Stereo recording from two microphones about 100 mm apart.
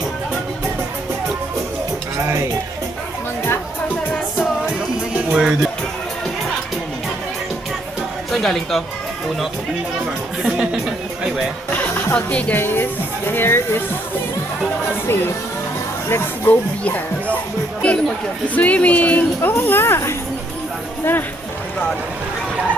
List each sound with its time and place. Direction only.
3.4 s music: 20° left (ahead or behind)
4.9 s music: 5° right (ahead or behind)
8.3 s speech: centre (ahead or behind)
10.4 s speech: 5° right (ahead or behind)
11.7 s music: 15° left (ahead or behind)
12.1 s speech: 10° left (ahead or behind)
15.0 s speech: 20° left (ahead or behind)
18.4 s speech: 15° left (ahead or behind)